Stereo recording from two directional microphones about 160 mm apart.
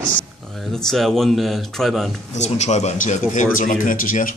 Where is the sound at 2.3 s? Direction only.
45° left (ahead or behind).